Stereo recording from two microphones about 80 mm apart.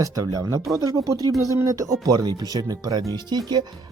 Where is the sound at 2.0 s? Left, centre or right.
Right.